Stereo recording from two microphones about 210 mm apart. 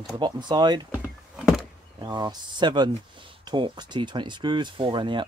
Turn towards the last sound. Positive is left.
turn(degrees=-25)  # may be behind; listen again after turning